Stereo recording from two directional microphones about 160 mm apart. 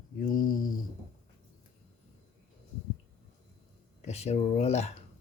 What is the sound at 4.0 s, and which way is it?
Speech, 45° left (ahead or behind).